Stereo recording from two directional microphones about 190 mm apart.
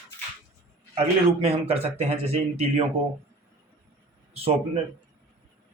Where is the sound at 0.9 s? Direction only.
30° right (ahead or behind).